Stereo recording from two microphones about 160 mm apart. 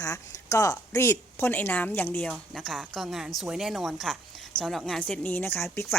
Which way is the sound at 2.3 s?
Centre (ahead or behind).